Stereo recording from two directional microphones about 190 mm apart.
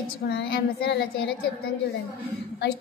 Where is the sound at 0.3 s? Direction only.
60° left (ahead or behind).